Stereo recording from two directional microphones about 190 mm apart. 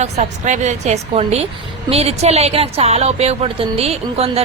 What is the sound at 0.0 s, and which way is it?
A woman's voice, 40° right (ahead or behind).